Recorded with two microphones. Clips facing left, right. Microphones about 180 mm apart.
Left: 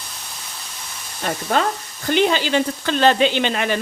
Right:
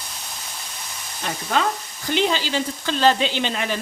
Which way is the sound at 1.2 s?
45° left (ahead or behind).